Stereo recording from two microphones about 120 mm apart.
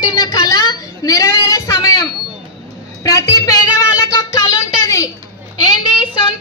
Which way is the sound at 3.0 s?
30° left (ahead or behind).